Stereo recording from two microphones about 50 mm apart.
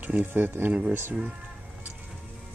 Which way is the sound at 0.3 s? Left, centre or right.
Right.